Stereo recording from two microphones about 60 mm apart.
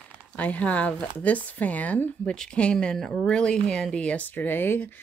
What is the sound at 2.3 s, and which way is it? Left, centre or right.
Speech, centre.